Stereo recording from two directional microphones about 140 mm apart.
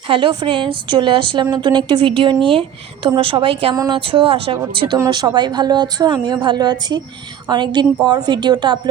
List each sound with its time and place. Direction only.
0.1 s a woman's voice: 35° right (ahead or behind)
4.9 s a woman's voice: 25° right (ahead or behind)